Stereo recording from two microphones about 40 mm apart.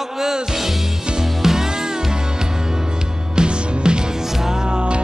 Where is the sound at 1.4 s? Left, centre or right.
Centre.